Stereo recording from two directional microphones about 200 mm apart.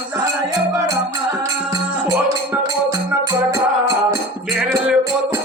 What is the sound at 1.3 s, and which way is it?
Music, 15° right (ahead or behind).